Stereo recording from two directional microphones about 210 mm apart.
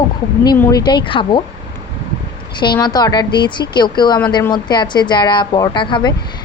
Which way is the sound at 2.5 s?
20° left (ahead or behind).